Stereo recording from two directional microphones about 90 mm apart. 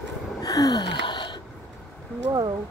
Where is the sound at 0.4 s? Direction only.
45° left (ahead or behind).